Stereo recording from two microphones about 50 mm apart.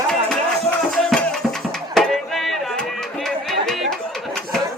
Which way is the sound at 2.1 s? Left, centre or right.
Centre.